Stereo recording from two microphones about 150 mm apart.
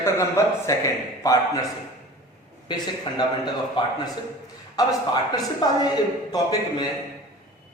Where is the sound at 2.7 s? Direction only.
30° left (ahead or behind).